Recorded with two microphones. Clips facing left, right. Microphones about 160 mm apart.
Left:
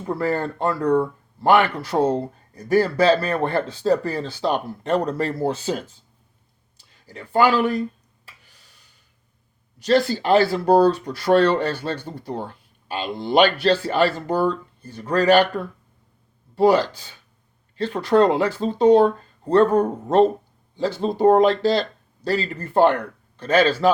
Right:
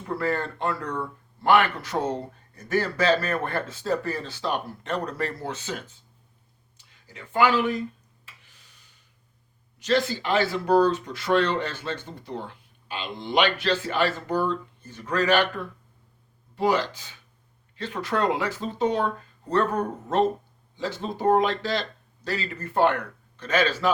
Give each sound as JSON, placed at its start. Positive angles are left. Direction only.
{"t": 0.0, "sound": "speech", "side_deg": 35}
{"t": 6.7, "sound": "a sound", "side_deg": 35}
{"t": 9.8, "sound": "speech", "side_deg": 35}
{"t": 16.6, "sound": "speech", "side_deg": 30}